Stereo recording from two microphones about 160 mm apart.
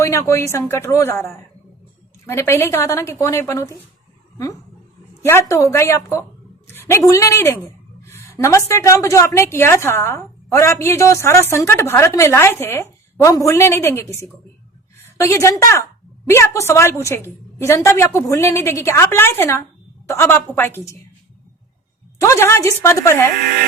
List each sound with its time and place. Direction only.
0.0 s a woman's voice: 20° left (ahead or behind)
5.2 s a woman's voice: 15° left (ahead or behind)
15.2 s a woman's voice: 15° left (ahead or behind)
16.6 s a woman's voice: 15° left (ahead or behind)
22.2 s a woman's voice: 20° left (ahead or behind)